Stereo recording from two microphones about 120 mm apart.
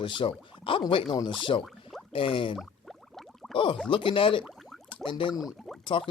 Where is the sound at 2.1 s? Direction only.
50° left (ahead or behind).